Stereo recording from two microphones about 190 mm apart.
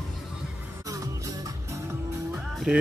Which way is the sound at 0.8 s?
15° right (ahead or behind).